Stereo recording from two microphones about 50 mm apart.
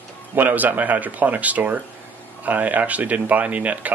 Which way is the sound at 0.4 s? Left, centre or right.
Right.